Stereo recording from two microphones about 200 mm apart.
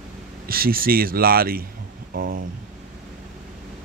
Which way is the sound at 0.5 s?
45° right (ahead or behind).